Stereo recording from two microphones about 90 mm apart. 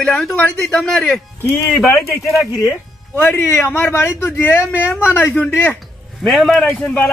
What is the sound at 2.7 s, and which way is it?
Speech, 25° left (ahead or behind).